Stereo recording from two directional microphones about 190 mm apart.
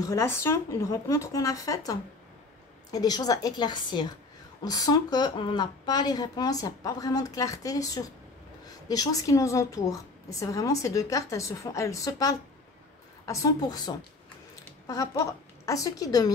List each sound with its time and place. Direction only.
0.0 s a woman's voice: 15° left (ahead or behind)